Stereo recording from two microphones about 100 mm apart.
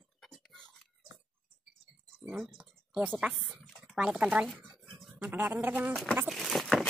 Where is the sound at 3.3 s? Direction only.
Centre (ahead or behind).